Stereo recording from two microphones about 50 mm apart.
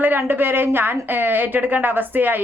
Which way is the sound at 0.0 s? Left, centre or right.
Right.